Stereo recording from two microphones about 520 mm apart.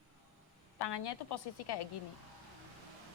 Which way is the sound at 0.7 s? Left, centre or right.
Left.